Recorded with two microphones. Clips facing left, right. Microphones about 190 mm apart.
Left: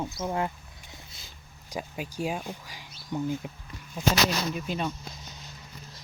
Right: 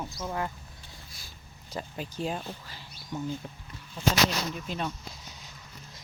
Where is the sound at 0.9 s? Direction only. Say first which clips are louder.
Left 1 dB; 20° left (ahead or behind).